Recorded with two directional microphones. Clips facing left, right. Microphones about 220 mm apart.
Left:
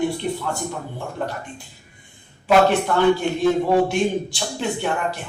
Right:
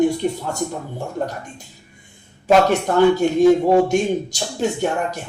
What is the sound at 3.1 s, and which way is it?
A man's voice, 45° right (ahead or behind).